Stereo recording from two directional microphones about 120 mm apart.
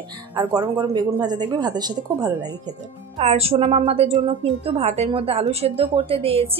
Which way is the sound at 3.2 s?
60° right (ahead or behind).